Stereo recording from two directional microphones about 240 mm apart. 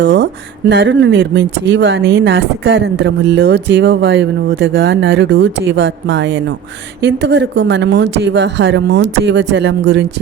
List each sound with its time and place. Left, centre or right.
0.0 s speech: right